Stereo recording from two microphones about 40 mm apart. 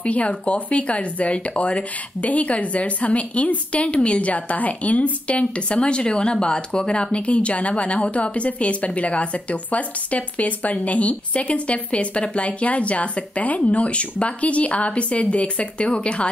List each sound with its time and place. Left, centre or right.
0.0 s a woman's voice: left